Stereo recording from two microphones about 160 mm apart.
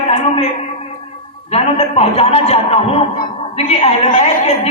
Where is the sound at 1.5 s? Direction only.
40° left (ahead or behind).